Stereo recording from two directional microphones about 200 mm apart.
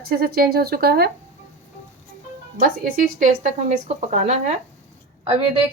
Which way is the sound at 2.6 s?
40° right (ahead or behind).